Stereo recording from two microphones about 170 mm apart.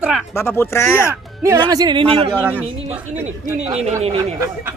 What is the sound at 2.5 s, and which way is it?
Speech, 10° right (ahead or behind).